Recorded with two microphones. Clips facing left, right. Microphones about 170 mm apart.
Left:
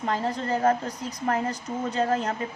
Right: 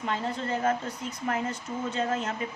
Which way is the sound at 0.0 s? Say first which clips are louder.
Left 3 dB; 40° left (ahead or behind).